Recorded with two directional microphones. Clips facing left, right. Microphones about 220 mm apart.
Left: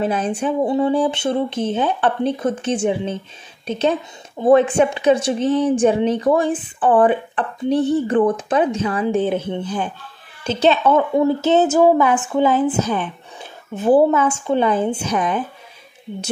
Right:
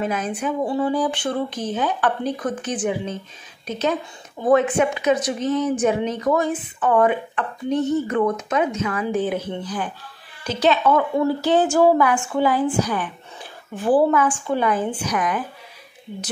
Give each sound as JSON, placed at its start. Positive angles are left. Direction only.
{"t": 0.0, "sound": "a woman's voice", "side_deg": 30}